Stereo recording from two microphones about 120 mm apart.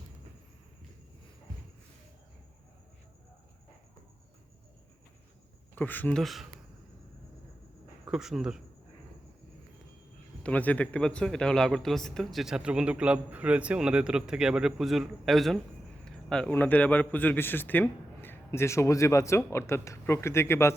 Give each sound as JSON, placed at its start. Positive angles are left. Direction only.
{"t": 5.7, "sound": "speech", "side_deg": 15}
{"t": 6.2, "sound": "a man's voice", "side_deg": 0}
{"t": 8.0, "sound": "speech", "side_deg": -5}
{"t": 10.4, "sound": "a man's voice", "side_deg": 10}